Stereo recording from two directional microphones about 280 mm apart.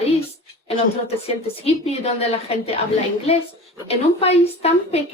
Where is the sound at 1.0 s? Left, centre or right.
Left.